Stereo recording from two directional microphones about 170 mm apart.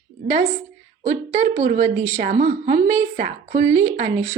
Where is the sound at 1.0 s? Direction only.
45° right (ahead or behind).